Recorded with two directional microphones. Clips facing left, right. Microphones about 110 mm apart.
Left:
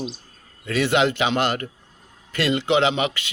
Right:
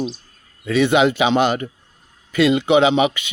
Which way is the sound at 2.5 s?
15° right (ahead or behind).